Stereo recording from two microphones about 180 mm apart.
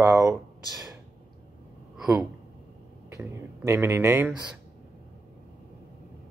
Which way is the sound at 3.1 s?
15° right (ahead or behind).